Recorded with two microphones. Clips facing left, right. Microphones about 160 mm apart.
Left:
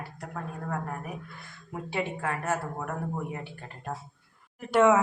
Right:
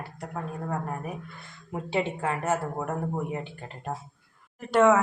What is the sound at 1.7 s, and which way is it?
A woman's voice, 25° right (ahead or behind).